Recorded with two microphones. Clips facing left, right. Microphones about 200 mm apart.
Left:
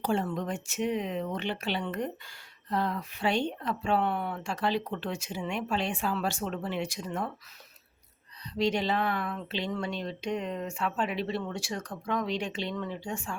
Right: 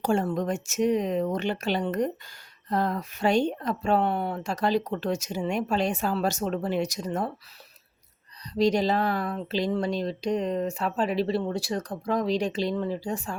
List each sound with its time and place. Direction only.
0.0 s speech: 45° right (ahead or behind)
8.5 s speech: 40° right (ahead or behind)